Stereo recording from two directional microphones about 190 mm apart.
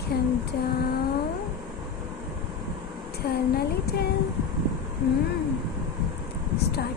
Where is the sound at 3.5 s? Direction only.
55° left (ahead or behind).